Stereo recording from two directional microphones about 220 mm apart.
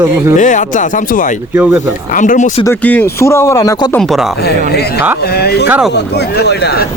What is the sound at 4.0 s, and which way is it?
Speech, centre (ahead or behind).